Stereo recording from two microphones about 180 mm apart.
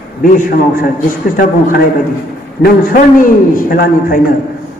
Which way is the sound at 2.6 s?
50° left (ahead or behind).